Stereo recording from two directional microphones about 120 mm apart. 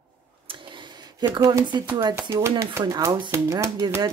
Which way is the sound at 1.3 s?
35° right (ahead or behind).